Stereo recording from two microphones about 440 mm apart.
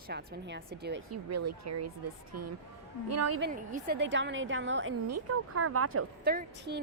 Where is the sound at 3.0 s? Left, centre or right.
Right.